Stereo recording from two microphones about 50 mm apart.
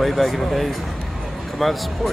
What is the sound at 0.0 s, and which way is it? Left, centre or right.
A man's voice, centre.